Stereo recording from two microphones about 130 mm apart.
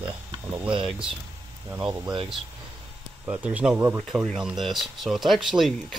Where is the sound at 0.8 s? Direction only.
Centre (ahead or behind).